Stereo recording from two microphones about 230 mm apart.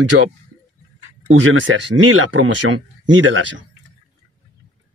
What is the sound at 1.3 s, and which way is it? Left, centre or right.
Speech, right.